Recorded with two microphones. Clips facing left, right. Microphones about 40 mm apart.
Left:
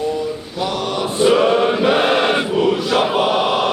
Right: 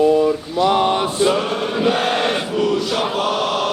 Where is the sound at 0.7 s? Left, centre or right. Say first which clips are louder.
Right 6 dB; right.